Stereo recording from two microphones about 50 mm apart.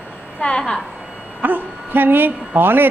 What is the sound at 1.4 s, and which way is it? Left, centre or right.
Speech, right.